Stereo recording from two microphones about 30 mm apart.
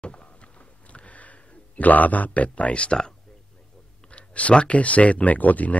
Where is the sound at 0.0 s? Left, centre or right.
Left.